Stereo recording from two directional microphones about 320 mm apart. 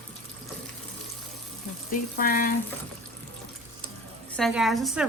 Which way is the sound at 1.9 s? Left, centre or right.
Left.